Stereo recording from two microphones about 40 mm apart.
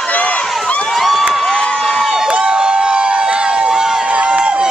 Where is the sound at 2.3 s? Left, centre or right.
Right.